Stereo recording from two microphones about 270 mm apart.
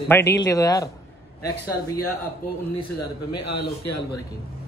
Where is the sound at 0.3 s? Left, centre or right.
Centre.